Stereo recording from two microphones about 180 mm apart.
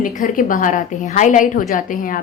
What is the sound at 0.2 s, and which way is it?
A woman's voice, 50° left (ahead or behind).